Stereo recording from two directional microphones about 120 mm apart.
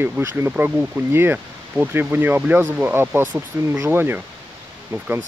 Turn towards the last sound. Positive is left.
turn(degrees=-15)  # may be behind; listen again after turning